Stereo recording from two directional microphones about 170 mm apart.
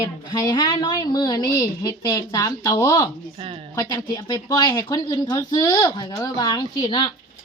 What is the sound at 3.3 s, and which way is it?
Speech, 30° right (ahead or behind).